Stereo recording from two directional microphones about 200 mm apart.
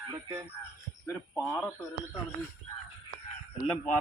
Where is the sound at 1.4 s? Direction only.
15° left (ahead or behind).